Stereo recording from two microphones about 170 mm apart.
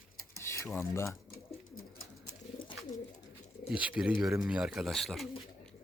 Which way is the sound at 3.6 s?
5° right (ahead or behind).